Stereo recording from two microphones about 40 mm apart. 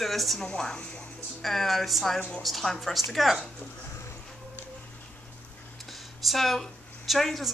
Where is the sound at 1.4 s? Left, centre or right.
Centre.